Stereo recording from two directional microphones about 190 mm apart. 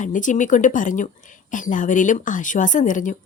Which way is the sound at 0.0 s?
40° left (ahead or behind).